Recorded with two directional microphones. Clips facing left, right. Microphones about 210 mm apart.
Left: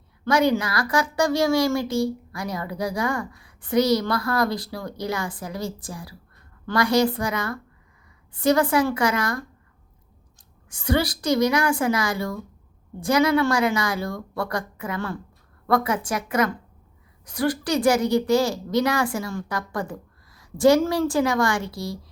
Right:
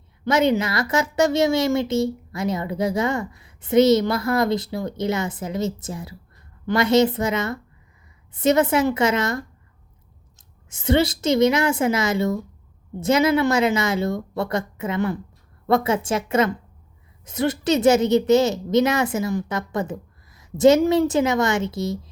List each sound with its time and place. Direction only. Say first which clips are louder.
0.3 s a child's voice: right 1 dB; 20° right (ahead or behind)